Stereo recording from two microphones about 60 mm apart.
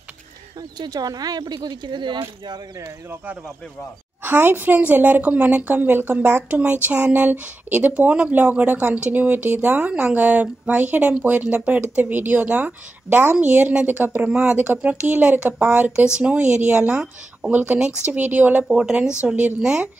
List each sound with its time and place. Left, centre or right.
0.8 s speech: right
4.2 s a woman's voice: right
8.1 s a woman's voice: centre
8.4 s a woman's voice: right
17.7 s speech: centre
18.0 s a woman's voice: right
18.7 s speech: centre